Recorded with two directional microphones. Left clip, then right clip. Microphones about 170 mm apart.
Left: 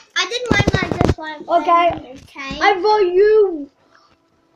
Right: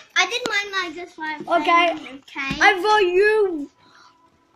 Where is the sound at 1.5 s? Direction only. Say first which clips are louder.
Left 3 dB; 50° right (ahead or behind).